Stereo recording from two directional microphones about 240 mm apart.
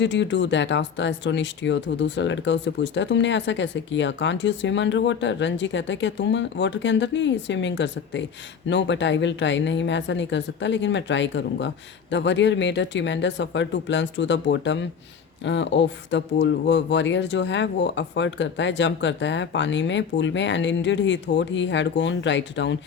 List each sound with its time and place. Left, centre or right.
0.0 s speech: left